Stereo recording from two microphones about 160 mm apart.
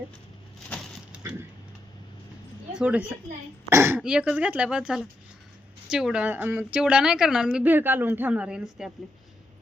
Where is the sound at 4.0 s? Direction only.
5° right (ahead or behind).